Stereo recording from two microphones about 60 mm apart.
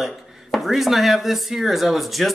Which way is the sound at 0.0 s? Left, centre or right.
Centre.